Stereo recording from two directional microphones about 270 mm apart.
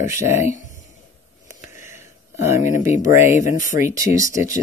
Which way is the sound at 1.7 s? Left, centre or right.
Centre.